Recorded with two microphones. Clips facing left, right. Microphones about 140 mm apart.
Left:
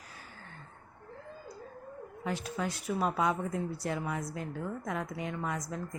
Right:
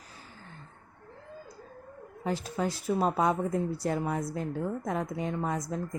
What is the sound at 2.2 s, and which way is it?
Speech, 35° right (ahead or behind).